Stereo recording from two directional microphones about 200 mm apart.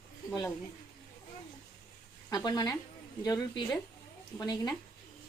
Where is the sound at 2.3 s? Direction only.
20° left (ahead or behind).